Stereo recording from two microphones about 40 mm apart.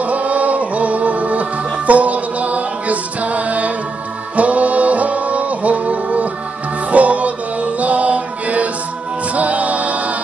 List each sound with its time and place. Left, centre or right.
0.0 s music: right